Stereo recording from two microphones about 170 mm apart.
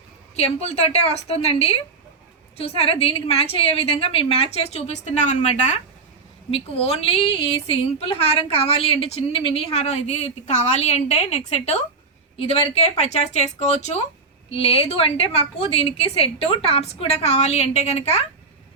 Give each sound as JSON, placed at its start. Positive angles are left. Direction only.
{"t": 0.3, "sound": "a woman's voice", "side_deg": 40}